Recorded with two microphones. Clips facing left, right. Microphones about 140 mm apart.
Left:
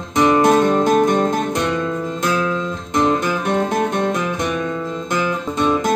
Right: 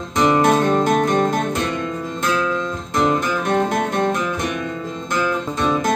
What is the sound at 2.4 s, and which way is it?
Guitar, 15° left (ahead or behind).